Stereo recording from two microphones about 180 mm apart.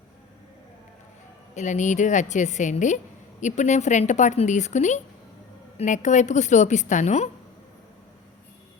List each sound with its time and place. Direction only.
1.5 s a woman's voice: 40° left (ahead or behind)